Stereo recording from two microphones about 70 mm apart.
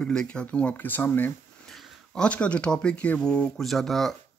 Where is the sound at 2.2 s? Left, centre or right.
Centre.